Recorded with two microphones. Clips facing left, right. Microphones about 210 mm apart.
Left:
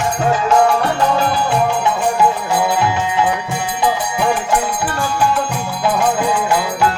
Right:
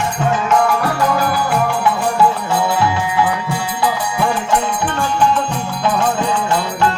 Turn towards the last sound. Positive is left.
turn(degrees=10)  # may be behind; listen again after turning